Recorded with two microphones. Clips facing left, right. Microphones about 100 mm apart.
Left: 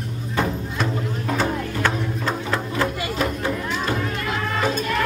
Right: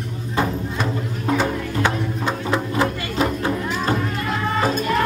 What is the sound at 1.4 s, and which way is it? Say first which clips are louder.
Music: left 1 dB; 15° right (ahead or behind).